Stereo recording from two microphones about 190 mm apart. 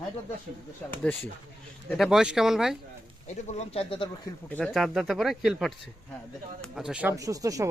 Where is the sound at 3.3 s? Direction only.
35° left (ahead or behind).